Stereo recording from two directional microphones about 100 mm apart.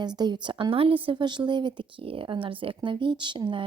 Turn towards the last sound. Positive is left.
turn(degrees=-55)  # may be behind; listen again after turning